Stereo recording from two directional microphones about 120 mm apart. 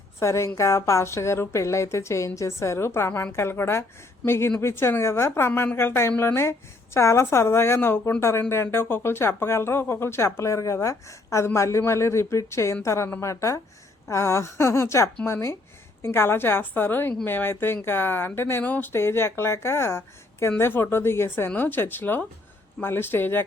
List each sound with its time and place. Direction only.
0.2 s speech: 25° left (ahead or behind)